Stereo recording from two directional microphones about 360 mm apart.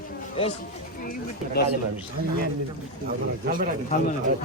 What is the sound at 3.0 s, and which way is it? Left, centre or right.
Speech, right.